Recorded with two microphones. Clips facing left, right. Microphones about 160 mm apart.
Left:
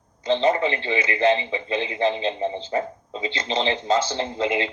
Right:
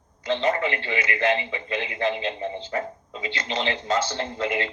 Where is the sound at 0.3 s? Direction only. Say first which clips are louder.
Left 3 dB; 25° left (ahead or behind).